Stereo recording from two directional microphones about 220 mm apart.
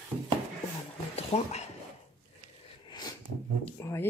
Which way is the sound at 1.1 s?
30° left (ahead or behind).